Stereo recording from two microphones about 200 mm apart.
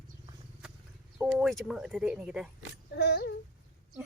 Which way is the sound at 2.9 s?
55° left (ahead or behind).